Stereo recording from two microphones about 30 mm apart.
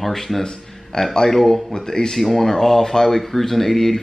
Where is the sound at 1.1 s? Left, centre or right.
Centre.